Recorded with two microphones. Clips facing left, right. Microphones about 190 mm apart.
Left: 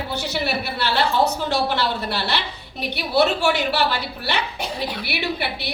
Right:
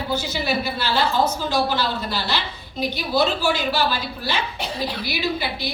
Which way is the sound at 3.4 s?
70° left (ahead or behind).